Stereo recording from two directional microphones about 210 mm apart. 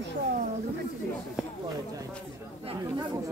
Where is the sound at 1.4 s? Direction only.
5° right (ahead or behind).